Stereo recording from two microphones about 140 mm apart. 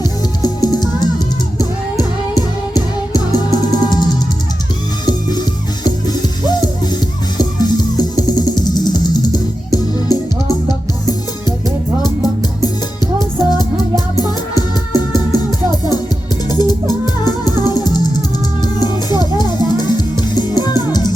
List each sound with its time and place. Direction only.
0.0 s music: 30° left (ahead or behind)
5.8 s music: 30° left (ahead or behind)
12.6 s music: 30° left (ahead or behind)